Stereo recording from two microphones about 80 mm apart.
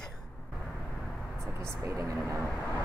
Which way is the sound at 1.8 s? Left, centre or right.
Right.